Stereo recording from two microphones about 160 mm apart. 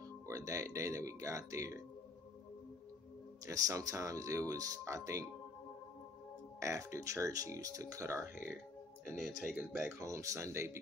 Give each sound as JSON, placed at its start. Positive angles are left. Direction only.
{"t": 0.3, "sound": "speech", "side_deg": -20}
{"t": 3.4, "sound": "speech", "side_deg": -20}
{"t": 6.6, "sound": "speech", "side_deg": -20}
{"t": 9.6, "sound": "speech", "side_deg": -10}